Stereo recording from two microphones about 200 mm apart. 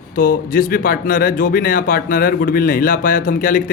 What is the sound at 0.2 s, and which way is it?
Speech, 45° left (ahead or behind).